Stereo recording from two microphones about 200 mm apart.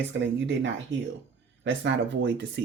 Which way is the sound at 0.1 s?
65° right (ahead or behind).